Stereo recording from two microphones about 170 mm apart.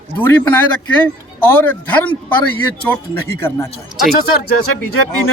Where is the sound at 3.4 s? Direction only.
15° left (ahead or behind).